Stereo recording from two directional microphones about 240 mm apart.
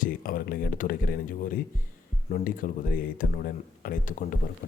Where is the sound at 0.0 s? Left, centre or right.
Left.